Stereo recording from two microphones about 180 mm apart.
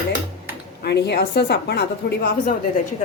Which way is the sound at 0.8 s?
65° left (ahead or behind).